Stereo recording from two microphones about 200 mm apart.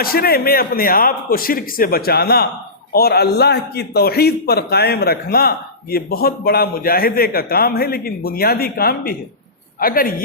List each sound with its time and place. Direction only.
0.0 s a man's voice: 50° left (ahead or behind)